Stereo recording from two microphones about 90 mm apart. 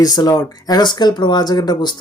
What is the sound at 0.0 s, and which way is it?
Speech, 45° left (ahead or behind).